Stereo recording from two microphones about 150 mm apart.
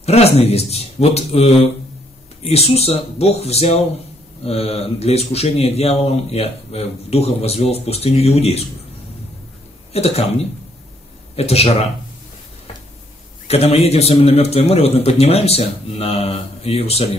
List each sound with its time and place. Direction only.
0.0 s speech: 45° left (ahead or behind)
9.9 s speech: 45° left (ahead or behind)
11.3 s speech: 45° left (ahead or behind)
13.5 s speech: 45° left (ahead or behind)